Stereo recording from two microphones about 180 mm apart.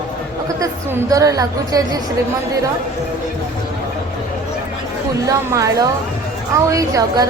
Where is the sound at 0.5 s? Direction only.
20° right (ahead or behind).